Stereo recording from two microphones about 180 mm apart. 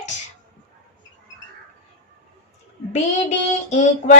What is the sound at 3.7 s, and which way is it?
Speech, 40° left (ahead or behind).